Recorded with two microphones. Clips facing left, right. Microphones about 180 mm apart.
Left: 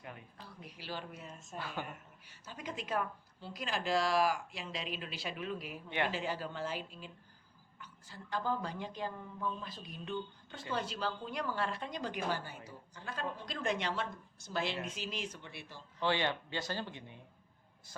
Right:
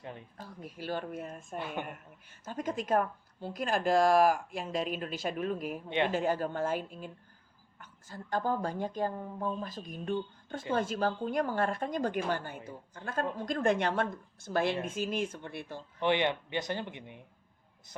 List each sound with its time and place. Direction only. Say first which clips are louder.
0.3 s speech: right 7 dB; 45° right (ahead or behind)
1.5 s speech: right 5 dB; 20° right (ahead or behind)
1.9 s a woman's voice: right 4 dB; 50° right (ahead or behind)
16.0 s speech: right 5 dB; 20° right (ahead or behind)